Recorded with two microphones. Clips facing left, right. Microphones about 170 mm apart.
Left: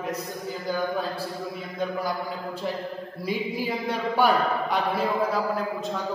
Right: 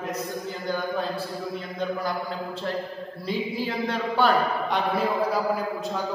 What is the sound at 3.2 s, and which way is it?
Mantra, 10° left (ahead or behind).